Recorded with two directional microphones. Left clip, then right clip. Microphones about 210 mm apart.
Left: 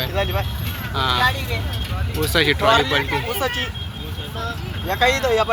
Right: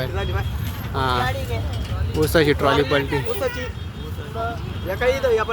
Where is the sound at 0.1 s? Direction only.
15° left (ahead or behind).